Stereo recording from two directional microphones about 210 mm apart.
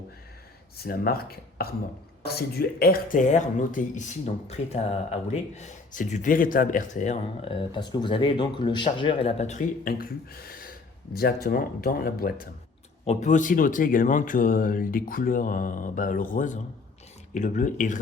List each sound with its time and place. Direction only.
0.9 s speech: 45° left (ahead or behind)
11.1 s speech: 45° left (ahead or behind)